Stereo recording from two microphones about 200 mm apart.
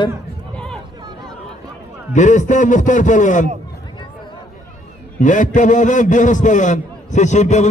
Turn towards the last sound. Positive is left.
turn(degrees=35)  # may be behind; listen again after turning